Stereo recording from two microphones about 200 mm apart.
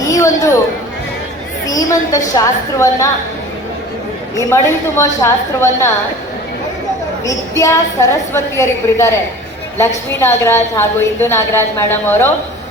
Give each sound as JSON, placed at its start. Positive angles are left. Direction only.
{"t": 0.0, "sound": "a sound", "side_deg": 15}
{"t": 1.6, "sound": "a woman's voice", "side_deg": 15}
{"t": 4.4, "sound": "a woman's voice", "side_deg": 15}
{"t": 7.3, "sound": "a woman's voice", "side_deg": 15}